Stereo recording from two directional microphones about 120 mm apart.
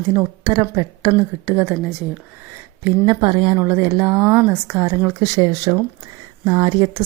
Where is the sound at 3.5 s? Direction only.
25° right (ahead or behind).